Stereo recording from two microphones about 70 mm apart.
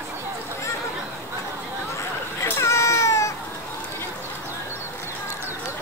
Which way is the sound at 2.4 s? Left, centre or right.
Left.